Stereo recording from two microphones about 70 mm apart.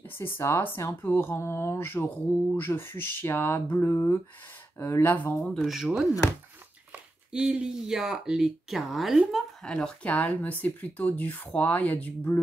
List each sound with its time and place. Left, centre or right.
0.2 s speech: left
4.8 s speech: left
5.4 s speech: centre
5.8 s speech: centre
7.3 s speech: centre
9.7 s speech: centre
10.1 s speech: left